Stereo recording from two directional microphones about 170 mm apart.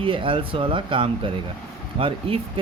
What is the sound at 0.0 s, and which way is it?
Speech, 30° right (ahead or behind).